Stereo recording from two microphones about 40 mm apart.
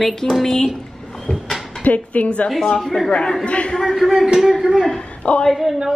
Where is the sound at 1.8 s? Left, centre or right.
Left.